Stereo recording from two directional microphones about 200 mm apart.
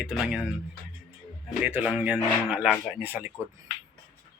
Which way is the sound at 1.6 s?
5° right (ahead or behind).